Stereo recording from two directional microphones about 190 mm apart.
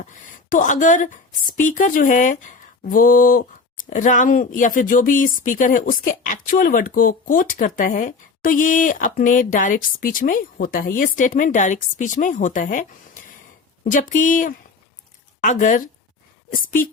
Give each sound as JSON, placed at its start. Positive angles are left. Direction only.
{"t": 0.5, "sound": "a woman's voice", "side_deg": 45}